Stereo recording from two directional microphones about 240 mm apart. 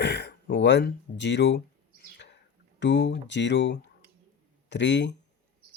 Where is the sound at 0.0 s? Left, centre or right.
Left.